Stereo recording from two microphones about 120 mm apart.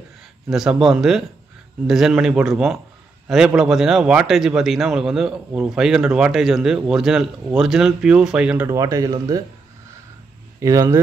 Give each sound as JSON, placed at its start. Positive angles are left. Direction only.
{"t": 0.5, "sound": "a man's voice", "side_deg": -5}
{"t": 8.6, "sound": "speech", "side_deg": -25}
{"t": 10.6, "sound": "speech", "side_deg": -25}